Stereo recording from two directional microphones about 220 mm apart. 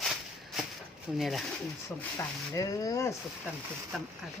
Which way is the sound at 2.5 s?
15° left (ahead or behind).